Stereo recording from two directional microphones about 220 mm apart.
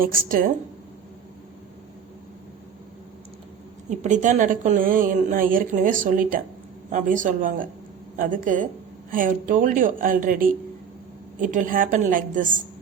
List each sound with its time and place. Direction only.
0.0 s a woman's voice: 40° right (ahead or behind)
3.8 s a woman's voice: 35° right (ahead or behind)